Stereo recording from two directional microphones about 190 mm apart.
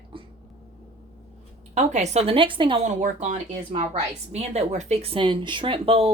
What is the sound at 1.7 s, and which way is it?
Speech, 35° right (ahead or behind).